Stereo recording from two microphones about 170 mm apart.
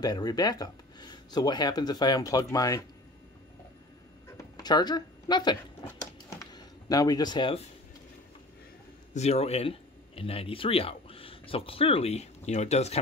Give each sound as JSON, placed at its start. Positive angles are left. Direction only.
{"t": 0.0, "sound": "speech", "side_deg": 25}
{"t": 4.4, "sound": "speech", "side_deg": 25}
{"t": 5.9, "sound": "a sound", "side_deg": 20}
{"t": 9.1, "sound": "speech", "side_deg": 40}